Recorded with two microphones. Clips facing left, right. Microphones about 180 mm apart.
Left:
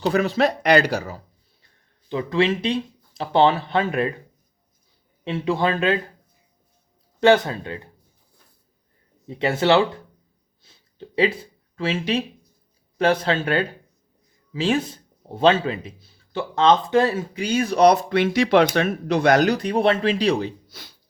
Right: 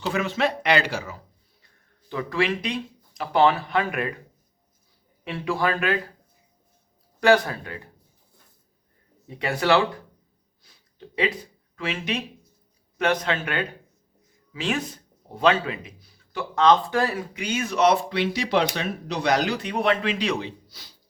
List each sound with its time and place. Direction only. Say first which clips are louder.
0.0 s speech: left 5 dB; 35° left (ahead or behind)
2.0 s speech: left 4 dB; 20° left (ahead or behind)
5.2 s speech: left 3 dB; 25° left (ahead or behind)
7.2 s speech: left 3 dB; 25° left (ahead or behind)
9.2 s speech: left 4 dB; 25° left (ahead or behind)
10.6 s a sound: left 4 dB; 25° left (ahead or behind)
11.8 s speech: left 5 dB; 30° left (ahead or behind)
20.7 s speech: left 6 dB; 50° left (ahead or behind)